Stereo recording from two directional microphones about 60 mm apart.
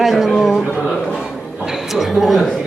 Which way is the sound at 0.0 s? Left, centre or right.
Centre.